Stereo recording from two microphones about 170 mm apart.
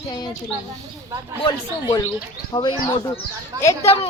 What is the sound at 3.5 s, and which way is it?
Speech, 20° right (ahead or behind).